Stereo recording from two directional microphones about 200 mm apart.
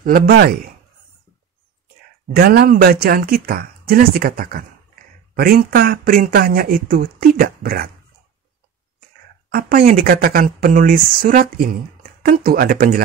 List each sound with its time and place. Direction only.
0.0 s speech: 45° right (ahead or behind)
2.3 s speech: 50° right (ahead or behind)
9.5 s speech: 45° right (ahead or behind)